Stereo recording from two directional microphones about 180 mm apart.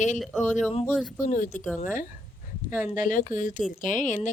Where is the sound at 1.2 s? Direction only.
45° left (ahead or behind).